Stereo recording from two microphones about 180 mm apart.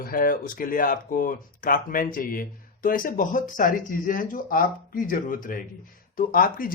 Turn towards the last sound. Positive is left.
turn(degrees=50)  # may be behind; listen again after turning